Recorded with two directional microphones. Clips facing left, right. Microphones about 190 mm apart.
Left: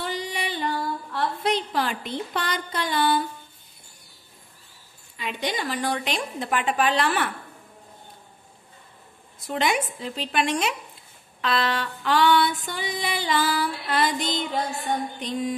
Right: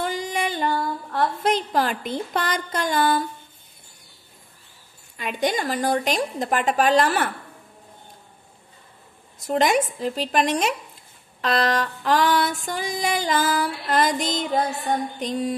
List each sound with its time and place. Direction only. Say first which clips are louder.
0.0 s music: right 4 dB; 45° right (ahead or behind)
1.1 s a sound: right 3 dB; 45° right (ahead or behind)
5.1 s female singing: right 5 dB; 45° right (ahead or behind)
9.5 s a woman's voice: right 5 dB; 40° right (ahead or behind)
11.4 s female singing: right 3 dB; 40° right (ahead or behind)